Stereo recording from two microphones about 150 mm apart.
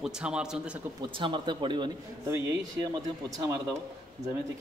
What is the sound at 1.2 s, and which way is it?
Speech, 35° right (ahead or behind).